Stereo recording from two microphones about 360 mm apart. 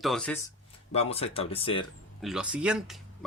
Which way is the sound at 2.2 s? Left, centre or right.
Centre.